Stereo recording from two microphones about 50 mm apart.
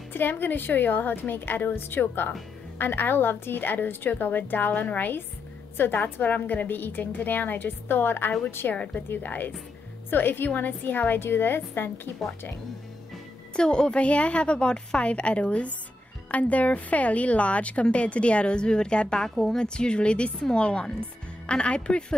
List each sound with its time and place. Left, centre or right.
0.1 s a woman's voice: left
8.7 s a woman's voice: left
9.1 s a woman's voice: left
13.6 s a woman's voice: centre